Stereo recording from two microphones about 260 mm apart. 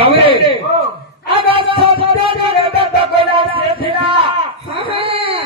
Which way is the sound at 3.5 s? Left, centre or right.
Right.